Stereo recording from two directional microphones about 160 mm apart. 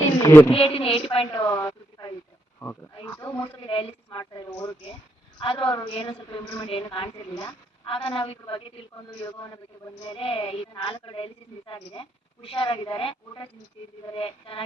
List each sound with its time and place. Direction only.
0.2 s a woman's voice: 15° left (ahead or behind)
0.5 s speech: 35° left (ahead or behind)
1.4 s a sound: 20° left (ahead or behind)
2.9 s wild animals: 25° left (ahead or behind)
3.7 s a sound: 35° left (ahead or behind)
5.4 s speech: 30° left (ahead or behind)